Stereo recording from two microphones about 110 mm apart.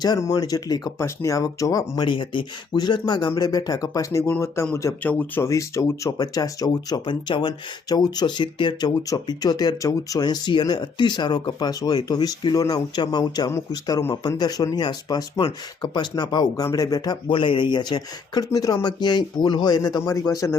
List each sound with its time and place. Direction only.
0.0 s speech: 35° left (ahead or behind)
2.0 s speech: 45° left (ahead or behind); by 4.9 s 30° left (ahead or behind)
5.0 s speech: 15° left (ahead or behind)
5.5 s speech: 30° left (ahead or behind)
17.2 s speech: 50° left (ahead or behind); by 20.6 s 30° left (ahead or behind)